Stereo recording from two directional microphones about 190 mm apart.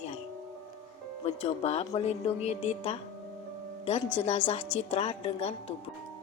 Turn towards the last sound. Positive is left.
turn(degrees=30)  # may be behind; listen again after turning